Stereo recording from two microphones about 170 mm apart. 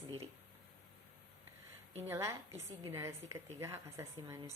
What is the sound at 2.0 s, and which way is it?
Speech, 15° right (ahead or behind).